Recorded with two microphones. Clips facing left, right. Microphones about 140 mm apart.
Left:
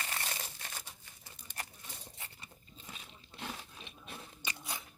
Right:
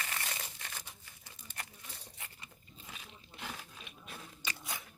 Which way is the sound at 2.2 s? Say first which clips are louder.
Even; 30° left (ahead or behind).